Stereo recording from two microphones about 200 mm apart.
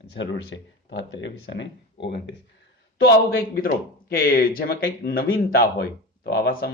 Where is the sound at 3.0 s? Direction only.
50° left (ahead or behind).